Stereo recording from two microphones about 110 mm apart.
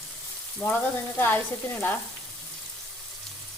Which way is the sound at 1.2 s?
20° left (ahead or behind).